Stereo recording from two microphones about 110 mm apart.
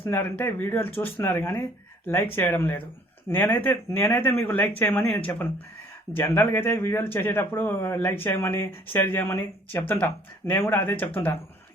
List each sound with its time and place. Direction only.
0.0 s speech: 20° left (ahead or behind)